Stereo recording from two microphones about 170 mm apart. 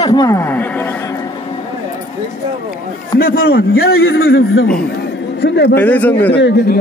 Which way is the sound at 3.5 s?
65° left (ahead or behind).